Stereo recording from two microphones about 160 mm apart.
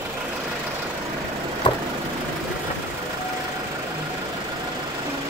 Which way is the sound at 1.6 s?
30° left (ahead or behind).